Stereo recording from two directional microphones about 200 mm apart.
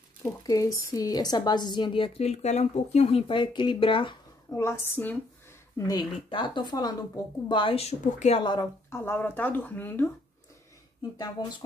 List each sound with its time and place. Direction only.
0.5 s a woman's voice: 20° left (ahead or behind)
11.4 s a woman's voice: 20° left (ahead or behind)